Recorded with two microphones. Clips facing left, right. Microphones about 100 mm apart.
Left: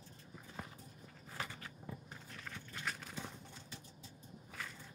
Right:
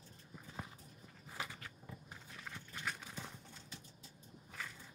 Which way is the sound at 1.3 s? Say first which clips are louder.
Left 1 dB; 5° right (ahead or behind).